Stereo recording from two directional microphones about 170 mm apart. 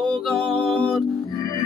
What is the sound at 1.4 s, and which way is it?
Music, 20° left (ahead or behind).